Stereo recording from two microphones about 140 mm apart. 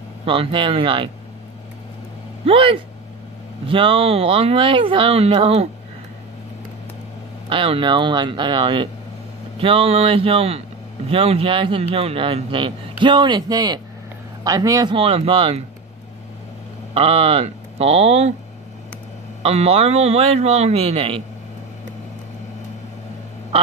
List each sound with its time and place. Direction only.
0.2 s a man's voice: 40° right (ahead or behind)
2.4 s a man's voice: 40° right (ahead or behind)
7.4 s a man's voice: 40° right (ahead or behind); by 15.0 s 25° right (ahead or behind)
15.0 s a man's voice: 40° right (ahead or behind)
16.9 s speech: 45° right (ahead or behind)
19.4 s a man's voice: 50° right (ahead or behind)